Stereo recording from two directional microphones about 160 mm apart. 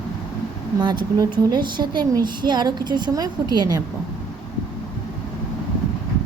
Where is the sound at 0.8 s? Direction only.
30° right (ahead or behind).